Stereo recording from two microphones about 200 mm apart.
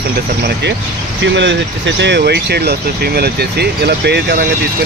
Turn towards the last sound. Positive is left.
turn(degrees=-55)  # may be behind; listen again after turning